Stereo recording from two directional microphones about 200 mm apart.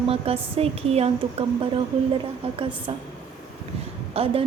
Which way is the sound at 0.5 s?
30° right (ahead or behind).